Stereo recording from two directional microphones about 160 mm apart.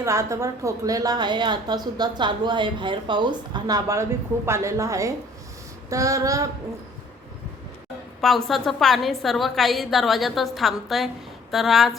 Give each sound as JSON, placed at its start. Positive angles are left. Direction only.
{"t": 0.0, "sound": "a woman's voice", "side_deg": -20}
{"t": 8.2, "sound": "a woman's voice", "side_deg": 0}